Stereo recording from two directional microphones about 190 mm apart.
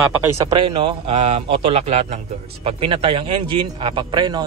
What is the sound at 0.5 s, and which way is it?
A man's voice, 25° right (ahead or behind).